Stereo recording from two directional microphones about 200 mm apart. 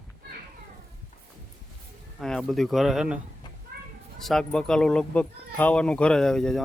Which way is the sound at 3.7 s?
50° right (ahead or behind).